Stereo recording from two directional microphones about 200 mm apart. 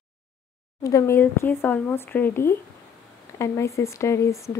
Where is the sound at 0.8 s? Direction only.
15° left (ahead or behind).